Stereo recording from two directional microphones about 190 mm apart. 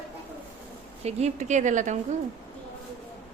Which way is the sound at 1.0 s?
35° right (ahead or behind).